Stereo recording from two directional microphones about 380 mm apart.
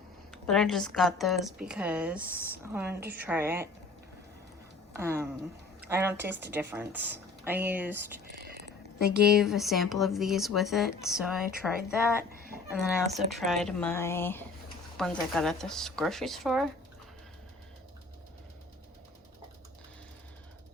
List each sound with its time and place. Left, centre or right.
0.4 s speech: centre
4.9 s speech: centre
8.3 s a sound: right
9.1 s speech: centre
12.3 s a sound: right
12.7 s speech: centre